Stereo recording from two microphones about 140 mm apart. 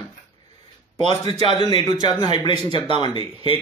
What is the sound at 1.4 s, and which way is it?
A man's voice, 35° left (ahead or behind).